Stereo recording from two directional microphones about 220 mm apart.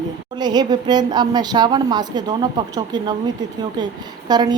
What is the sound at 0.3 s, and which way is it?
A woman's voice, 20° right (ahead or behind).